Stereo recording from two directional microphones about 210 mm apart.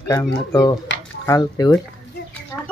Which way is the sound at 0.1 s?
20° left (ahead or behind).